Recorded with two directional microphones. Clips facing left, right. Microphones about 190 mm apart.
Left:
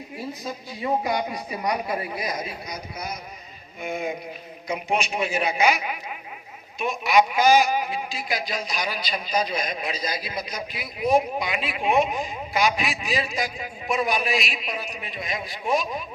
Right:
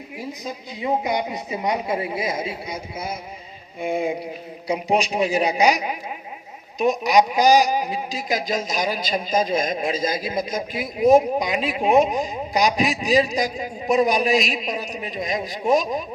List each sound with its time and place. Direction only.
0.4 s a man's voice: 20° right (ahead or behind); by 16.0 s 40° right (ahead or behind)